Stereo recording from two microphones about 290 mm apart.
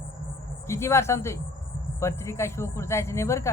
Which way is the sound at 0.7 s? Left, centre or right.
Centre.